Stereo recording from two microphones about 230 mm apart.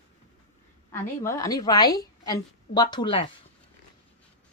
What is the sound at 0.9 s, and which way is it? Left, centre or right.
A woman's voice, centre.